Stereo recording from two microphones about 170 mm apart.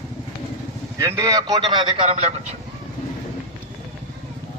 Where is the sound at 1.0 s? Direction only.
15° right (ahead or behind); by 2.5 s 40° right (ahead or behind).